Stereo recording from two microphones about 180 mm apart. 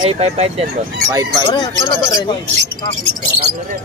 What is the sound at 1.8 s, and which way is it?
Speech, 25° left (ahead or behind).